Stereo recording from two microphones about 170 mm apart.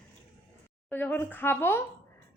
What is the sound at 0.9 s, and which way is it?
Speech, 10° left (ahead or behind).